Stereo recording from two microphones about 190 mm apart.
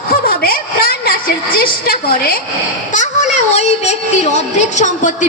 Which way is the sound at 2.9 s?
40° left (ahead or behind).